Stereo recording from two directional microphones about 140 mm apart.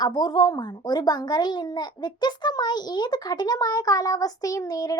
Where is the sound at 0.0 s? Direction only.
30° left (ahead or behind).